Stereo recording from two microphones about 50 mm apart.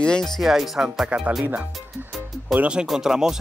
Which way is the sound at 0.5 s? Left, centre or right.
Centre.